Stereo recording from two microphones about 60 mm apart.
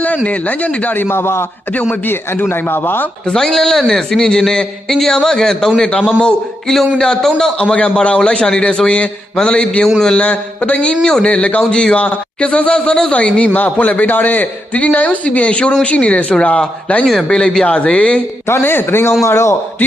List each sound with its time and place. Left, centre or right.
0.3 s a man's voice: left
0.9 s a man's voice: left
1.7 s a man's voice: centre
2.5 s speech: left
3.2 s a man's voice: centre
7.0 s a man's voice: centre
7.6 s a man's voice: left
18.6 s speech: left
19.2 s a man's voice: left